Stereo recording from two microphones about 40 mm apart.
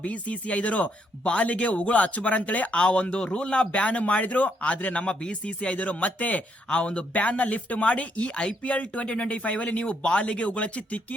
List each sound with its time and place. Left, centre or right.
0.0 s speech: left
2.7 s speech: left
6.7 s speech: left